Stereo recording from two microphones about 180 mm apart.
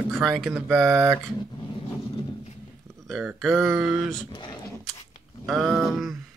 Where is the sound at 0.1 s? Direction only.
Centre (ahead or behind).